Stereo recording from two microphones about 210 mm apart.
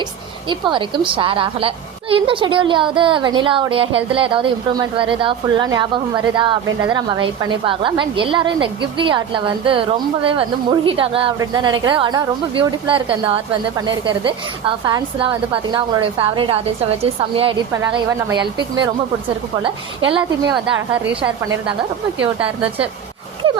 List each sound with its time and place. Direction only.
0.4 s a woman's voice: 25° right (ahead or behind)
17.7 s a woman's voice: 15° right (ahead or behind)
19.6 s a woman's voice: 25° right (ahead or behind)
20.7 s a woman's voice: 5° right (ahead or behind)